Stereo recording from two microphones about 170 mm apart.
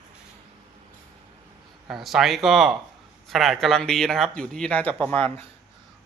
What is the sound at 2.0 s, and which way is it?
Speech, centre (ahead or behind).